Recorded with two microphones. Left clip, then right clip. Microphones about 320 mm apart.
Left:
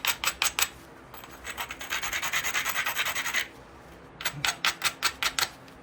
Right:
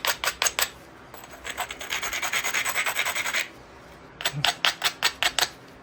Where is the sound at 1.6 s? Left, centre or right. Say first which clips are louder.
Left 1 dB; centre.